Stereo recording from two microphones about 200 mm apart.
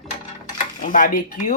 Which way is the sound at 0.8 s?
40° left (ahead or behind).